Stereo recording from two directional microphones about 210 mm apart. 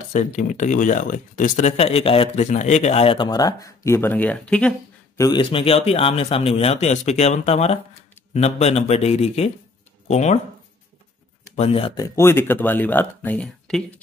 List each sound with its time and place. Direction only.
0.1 s speech: 35° left (ahead or behind); by 5.2 s 5° left (ahead or behind)
5.2 s a man's voice: 20° left (ahead or behind)
11.5 s speech: 30° left (ahead or behind)
12.2 s speech: 10° left (ahead or behind)